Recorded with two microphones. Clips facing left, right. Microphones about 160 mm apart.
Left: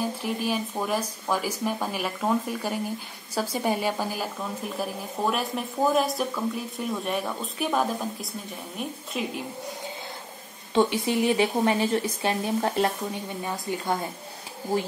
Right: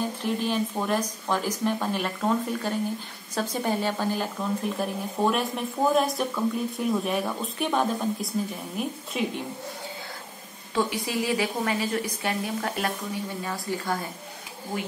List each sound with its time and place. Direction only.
0.0 s a woman's voice: 5° left (ahead or behind)
10.7 s a woman's voice: 25° left (ahead or behind)